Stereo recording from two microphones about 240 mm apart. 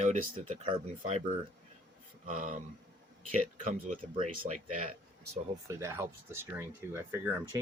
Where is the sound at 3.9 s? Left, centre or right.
Right.